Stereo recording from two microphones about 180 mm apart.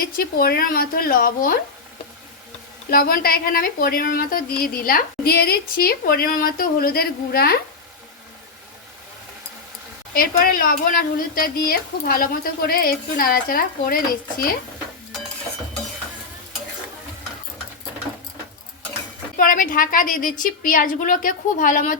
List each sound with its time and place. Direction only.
0.2 s a woman's voice: 55° left (ahead or behind)
2.9 s a woman's voice: 55° left (ahead or behind)
10.2 s a woman's voice: 55° left (ahead or behind)
19.4 s a woman's voice: 50° left (ahead or behind)